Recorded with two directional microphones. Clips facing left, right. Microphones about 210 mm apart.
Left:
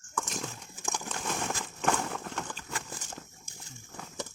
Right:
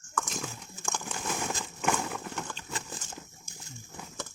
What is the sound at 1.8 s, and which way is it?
Horse, 5° right (ahead or behind).